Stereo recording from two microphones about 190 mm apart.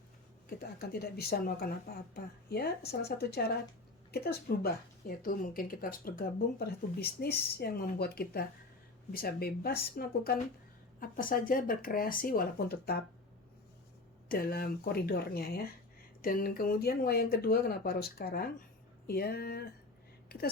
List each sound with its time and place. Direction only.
0.8 s a woman's voice: 55° left (ahead or behind)
14.3 s a woman's voice: 50° left (ahead or behind)
20.2 s a sound: 55° left (ahead or behind)